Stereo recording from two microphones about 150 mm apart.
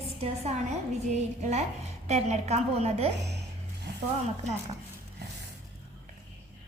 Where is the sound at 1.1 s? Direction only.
50° right (ahead or behind).